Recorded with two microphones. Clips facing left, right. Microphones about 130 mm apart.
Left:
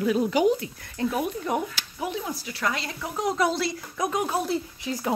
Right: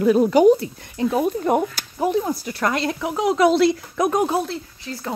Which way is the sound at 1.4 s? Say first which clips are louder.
Right 8 dB; 50° right (ahead or behind).